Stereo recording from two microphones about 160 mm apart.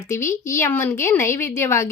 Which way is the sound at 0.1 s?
15° left (ahead or behind).